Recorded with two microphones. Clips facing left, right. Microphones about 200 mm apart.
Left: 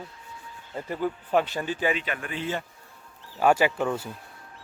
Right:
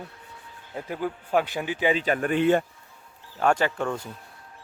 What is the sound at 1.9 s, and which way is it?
Speech, 40° right (ahead or behind).